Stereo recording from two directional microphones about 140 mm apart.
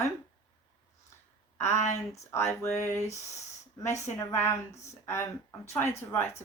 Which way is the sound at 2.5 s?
20° left (ahead or behind).